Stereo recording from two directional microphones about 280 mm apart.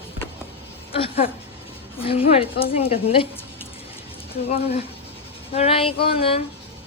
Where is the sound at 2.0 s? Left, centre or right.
Centre.